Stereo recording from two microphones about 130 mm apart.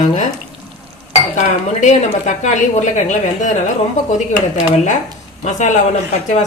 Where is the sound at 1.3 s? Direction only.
65° left (ahead or behind).